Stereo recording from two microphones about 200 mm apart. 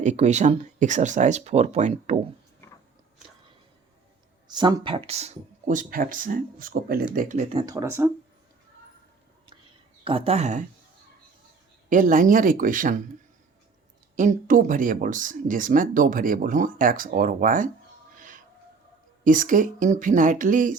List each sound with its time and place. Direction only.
0.0 s speech: 35° right (ahead or behind)
4.4 s speech: 20° right (ahead or behind); by 7.4 s 40° right (ahead or behind)
7.5 s speech: 20° right (ahead or behind)
10.0 s speech: 30° right (ahead or behind)
11.9 s speech: 40° right (ahead or behind)
14.2 s speech: 40° right (ahead or behind)
18.2 s a sound: 40° right (ahead or behind)
19.2 s speech: 40° right (ahead or behind)